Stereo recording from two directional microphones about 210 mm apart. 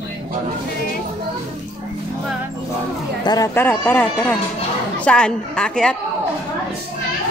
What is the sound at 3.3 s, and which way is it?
A woman's voice, 15° left (ahead or behind).